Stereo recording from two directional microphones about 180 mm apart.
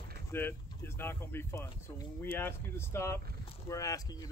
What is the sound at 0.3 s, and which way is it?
Speech, 15° left (ahead or behind).